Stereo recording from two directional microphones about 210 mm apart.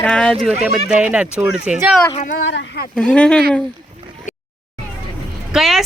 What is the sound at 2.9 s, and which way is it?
Speech, 5° left (ahead or behind).